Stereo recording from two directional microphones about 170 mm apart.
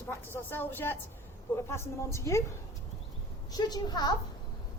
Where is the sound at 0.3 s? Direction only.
10° left (ahead or behind).